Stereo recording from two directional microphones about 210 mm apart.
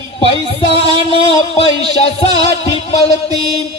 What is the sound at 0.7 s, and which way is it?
Speech, 25° left (ahead or behind).